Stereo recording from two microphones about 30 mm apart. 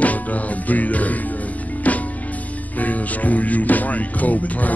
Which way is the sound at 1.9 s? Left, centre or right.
Left.